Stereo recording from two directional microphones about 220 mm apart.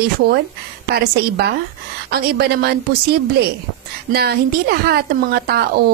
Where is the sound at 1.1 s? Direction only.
45° right (ahead or behind).